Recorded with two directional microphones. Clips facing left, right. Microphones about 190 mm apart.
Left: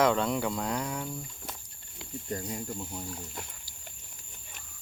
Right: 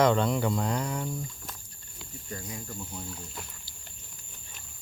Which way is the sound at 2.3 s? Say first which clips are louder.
Left 4 dB; 30° left (ahead or behind).